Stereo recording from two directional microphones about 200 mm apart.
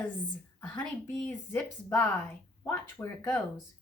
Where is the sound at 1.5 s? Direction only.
5° left (ahead or behind).